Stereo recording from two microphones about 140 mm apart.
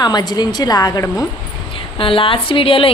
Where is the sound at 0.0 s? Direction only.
30° left (ahead or behind).